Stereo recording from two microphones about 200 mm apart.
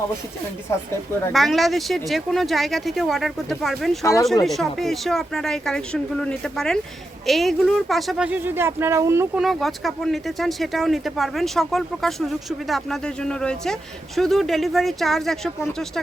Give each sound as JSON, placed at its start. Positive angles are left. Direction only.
{"t": 1.3, "sound": "speech", "side_deg": 0}
{"t": 4.0, "sound": "speech", "side_deg": 15}
{"t": 4.4, "sound": "speech", "side_deg": 0}
{"t": 9.4, "sound": "speech", "side_deg": 0}